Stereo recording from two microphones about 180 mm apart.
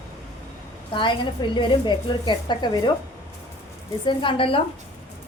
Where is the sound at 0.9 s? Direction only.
25° left (ahead or behind).